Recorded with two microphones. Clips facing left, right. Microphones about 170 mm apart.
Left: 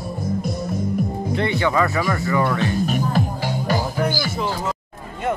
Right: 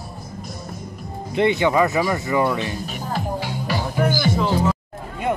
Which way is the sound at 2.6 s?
55° left (ahead or behind).